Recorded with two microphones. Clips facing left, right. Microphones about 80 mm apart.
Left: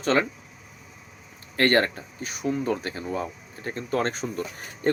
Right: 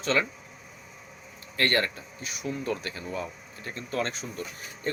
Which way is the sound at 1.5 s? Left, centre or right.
Left.